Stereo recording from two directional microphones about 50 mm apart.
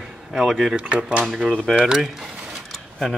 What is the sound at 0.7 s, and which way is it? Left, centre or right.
Speech, right.